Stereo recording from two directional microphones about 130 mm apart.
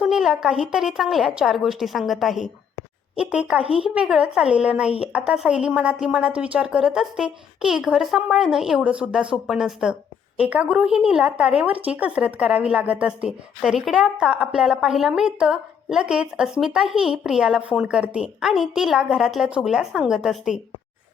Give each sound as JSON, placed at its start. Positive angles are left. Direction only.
{"t": 0.0, "sound": "a woman's voice", "side_deg": -5}